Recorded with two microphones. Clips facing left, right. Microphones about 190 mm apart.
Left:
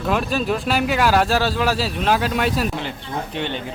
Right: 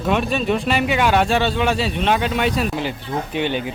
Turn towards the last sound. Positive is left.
turn(degrees=-5)  # may be behind; listen again after turning